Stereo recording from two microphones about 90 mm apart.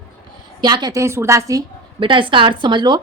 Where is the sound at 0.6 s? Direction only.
50° right (ahead or behind).